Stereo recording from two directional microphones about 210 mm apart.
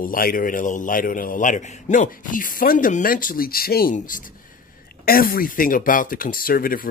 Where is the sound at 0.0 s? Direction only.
40° left (ahead or behind).